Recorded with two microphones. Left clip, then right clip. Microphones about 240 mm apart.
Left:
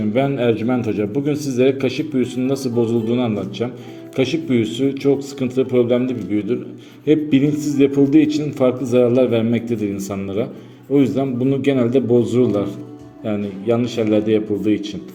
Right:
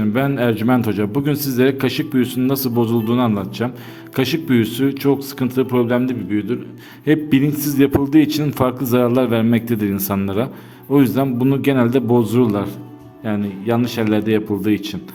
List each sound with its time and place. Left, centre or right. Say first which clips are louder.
0.0 s a man's voice: left 1 dB; right